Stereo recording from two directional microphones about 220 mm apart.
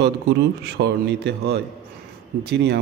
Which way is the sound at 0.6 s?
50° right (ahead or behind).